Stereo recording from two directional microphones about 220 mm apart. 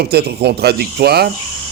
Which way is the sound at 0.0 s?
45° right (ahead or behind).